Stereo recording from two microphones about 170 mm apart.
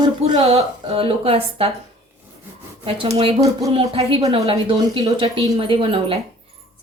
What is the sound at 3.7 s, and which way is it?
A woman's voice, 35° right (ahead or behind).